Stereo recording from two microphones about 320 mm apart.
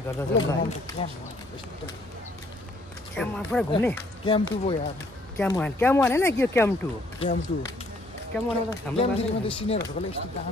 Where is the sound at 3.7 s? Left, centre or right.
Centre.